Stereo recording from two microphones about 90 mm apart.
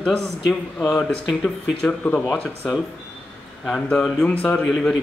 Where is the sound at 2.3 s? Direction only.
15° left (ahead or behind).